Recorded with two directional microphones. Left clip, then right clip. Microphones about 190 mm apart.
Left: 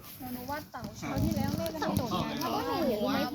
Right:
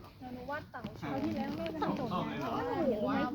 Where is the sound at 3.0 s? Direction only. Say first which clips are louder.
Left 2 dB; 20° left (ahead or behind).